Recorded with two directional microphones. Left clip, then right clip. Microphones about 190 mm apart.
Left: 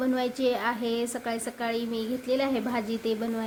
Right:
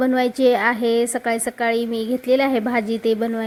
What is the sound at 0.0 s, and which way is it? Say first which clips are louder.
A woman's voice: right 10 dB; 30° right (ahead or behind).